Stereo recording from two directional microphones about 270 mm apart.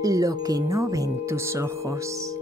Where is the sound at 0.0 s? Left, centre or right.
Centre.